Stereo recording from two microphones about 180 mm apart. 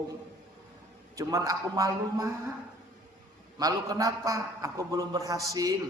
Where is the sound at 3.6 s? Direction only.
20° right (ahead or behind).